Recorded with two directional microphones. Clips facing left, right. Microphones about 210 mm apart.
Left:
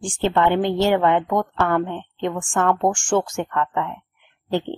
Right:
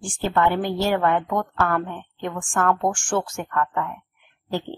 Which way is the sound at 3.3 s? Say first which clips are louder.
Left 2 dB; 25° left (ahead or behind).